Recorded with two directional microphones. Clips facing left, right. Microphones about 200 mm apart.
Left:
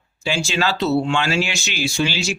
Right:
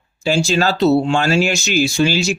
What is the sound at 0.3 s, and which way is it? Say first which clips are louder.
Speech: right 5 dB; 40° right (ahead or behind).